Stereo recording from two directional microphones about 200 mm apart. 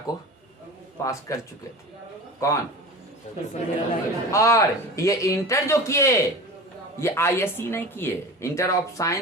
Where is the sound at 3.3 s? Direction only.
35° left (ahead or behind).